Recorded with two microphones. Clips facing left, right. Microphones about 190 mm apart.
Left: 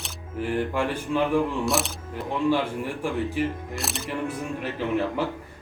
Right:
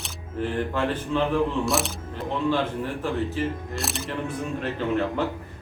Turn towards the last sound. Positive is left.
turn(degrees=10)  # may be behind; listen again after turning